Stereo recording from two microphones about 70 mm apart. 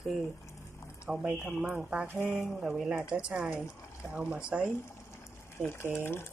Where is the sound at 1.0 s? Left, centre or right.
Centre.